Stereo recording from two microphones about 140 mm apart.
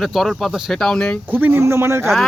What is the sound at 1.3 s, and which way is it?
Speech, 15° right (ahead or behind).